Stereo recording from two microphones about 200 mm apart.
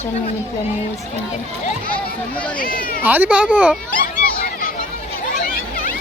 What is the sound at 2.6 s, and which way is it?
Speech, 45° left (ahead or behind).